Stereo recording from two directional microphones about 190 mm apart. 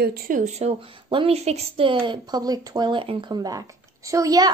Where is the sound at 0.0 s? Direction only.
55° right (ahead or behind).